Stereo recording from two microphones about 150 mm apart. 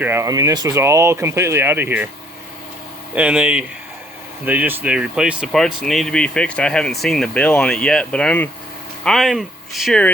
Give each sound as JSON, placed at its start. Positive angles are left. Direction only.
{"t": 0.0, "sound": "speech", "side_deg": -15}
{"t": 3.2, "sound": "speech", "side_deg": -10}